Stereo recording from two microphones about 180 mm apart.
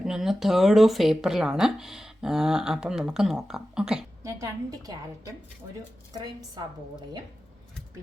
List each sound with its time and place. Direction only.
0.0 s speech: 5° right (ahead or behind)
4.2 s a woman's voice: 15° right (ahead or behind)
6.6 s a woman's voice: 25° right (ahead or behind)